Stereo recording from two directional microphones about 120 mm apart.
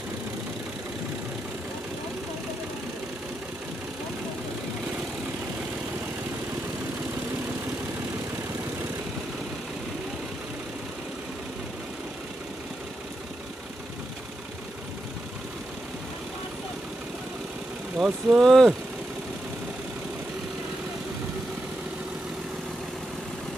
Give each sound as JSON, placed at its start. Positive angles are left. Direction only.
{"t": 17.9, "sound": "speech", "side_deg": -5}